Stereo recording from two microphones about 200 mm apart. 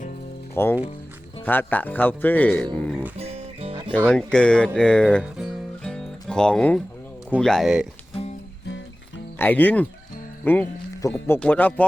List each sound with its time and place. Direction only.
0.5 s speech: 10° left (ahead or behind)
3.2 s music: 30° right (ahead or behind)
3.9 s speech: 5° left (ahead or behind)
9.4 s speech: 10° left (ahead or behind)